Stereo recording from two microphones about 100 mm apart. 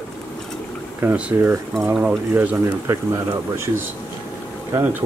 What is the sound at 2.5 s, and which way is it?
Speech, 25° right (ahead or behind).